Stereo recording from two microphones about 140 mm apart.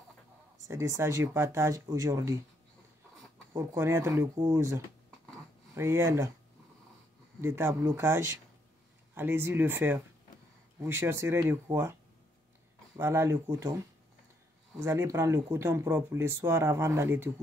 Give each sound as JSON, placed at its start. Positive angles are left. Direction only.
{"t": 0.7, "sound": "speech", "side_deg": -20}
{"t": 3.5, "sound": "speech", "side_deg": -20}
{"t": 7.4, "sound": "speech", "side_deg": -15}